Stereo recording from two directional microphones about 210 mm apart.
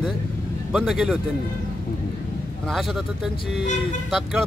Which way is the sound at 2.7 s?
Centre (ahead or behind).